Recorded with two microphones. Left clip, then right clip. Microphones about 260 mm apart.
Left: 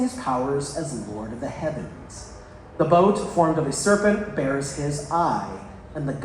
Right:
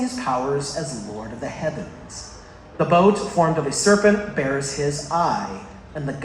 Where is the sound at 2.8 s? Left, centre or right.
Right.